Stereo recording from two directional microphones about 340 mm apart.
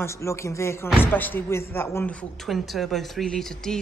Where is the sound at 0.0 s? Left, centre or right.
Centre.